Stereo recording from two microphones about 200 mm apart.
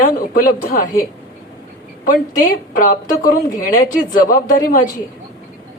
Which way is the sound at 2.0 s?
45° left (ahead or behind).